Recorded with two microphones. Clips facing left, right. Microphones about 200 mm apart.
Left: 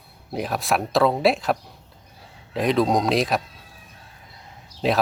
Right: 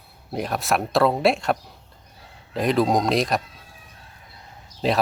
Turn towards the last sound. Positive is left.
turn(degrees=0)  # may be behind; listen again after turning